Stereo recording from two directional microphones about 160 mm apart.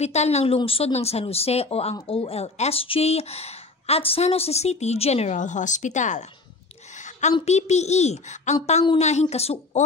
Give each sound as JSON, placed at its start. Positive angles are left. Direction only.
{"t": 0.0, "sound": "a child's voice", "side_deg": 45}
{"t": 7.3, "sound": "a child's voice", "side_deg": 45}